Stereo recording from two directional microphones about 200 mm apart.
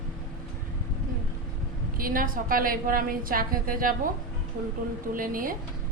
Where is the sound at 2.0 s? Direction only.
45° right (ahead or behind).